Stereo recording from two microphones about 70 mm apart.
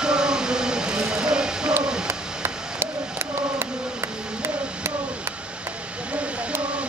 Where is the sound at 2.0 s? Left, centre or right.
Right.